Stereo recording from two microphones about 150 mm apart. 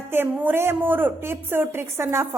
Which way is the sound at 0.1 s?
15° right (ahead or behind).